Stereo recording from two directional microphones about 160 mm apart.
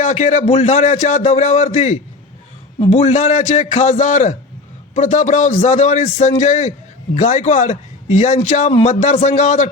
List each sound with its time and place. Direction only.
0.0 s a man's voice: 45° left (ahead or behind)